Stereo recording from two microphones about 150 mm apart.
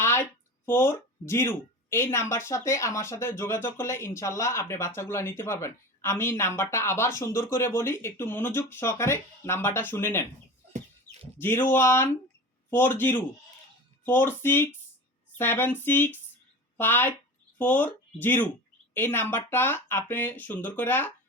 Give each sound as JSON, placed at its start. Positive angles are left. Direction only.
{"t": 0.0, "sound": "speech", "side_deg": 15}
{"t": 11.3, "sound": "speech", "side_deg": 15}